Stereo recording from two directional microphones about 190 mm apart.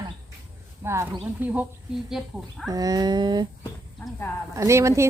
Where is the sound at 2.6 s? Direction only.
20° right (ahead or behind).